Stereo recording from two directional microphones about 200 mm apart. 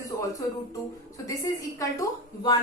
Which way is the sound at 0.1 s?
15° left (ahead or behind).